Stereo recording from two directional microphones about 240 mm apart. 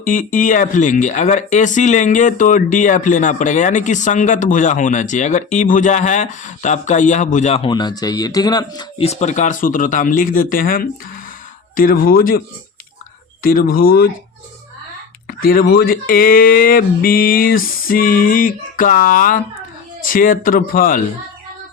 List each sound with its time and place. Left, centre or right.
0.0 s speech: left
13.4 s speech: left
15.3 s speech: left